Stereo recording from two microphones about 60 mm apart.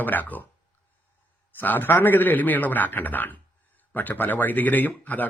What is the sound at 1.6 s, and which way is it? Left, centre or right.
A man's voice, left.